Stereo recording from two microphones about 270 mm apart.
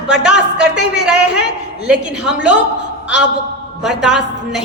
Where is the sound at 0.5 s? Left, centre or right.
Right.